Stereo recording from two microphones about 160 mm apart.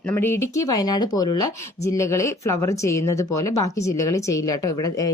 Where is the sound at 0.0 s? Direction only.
15° left (ahead or behind).